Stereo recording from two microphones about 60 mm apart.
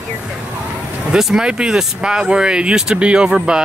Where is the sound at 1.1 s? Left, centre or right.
Centre.